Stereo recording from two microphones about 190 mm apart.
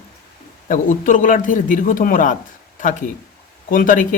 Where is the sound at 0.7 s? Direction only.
45° left (ahead or behind).